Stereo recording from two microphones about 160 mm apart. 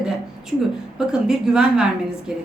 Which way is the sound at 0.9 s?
5° right (ahead or behind).